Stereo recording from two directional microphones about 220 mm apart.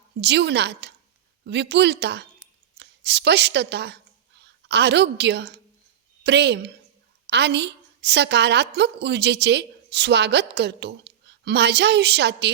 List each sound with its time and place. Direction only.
0.2 s a woman's voice: 50° right (ahead or behind)